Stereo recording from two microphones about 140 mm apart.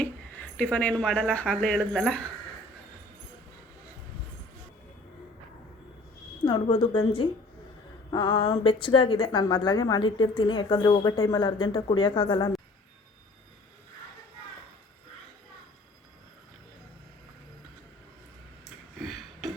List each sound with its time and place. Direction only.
0.0 s speech: 10° left (ahead or behind)
6.4 s a woman's voice: 35° left (ahead or behind)
18.9 s a sound: centre (ahead or behind)